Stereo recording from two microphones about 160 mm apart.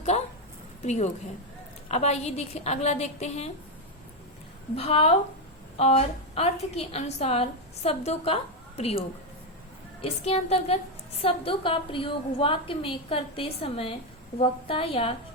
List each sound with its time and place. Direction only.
0.0 s a sound: 45° left (ahead or behind)
0.9 s a woman's voice: 45° left (ahead or behind)
4.7 s a woman's voice: 40° left (ahead or behind)
10.0 s a woman's voice: 40° left (ahead or behind)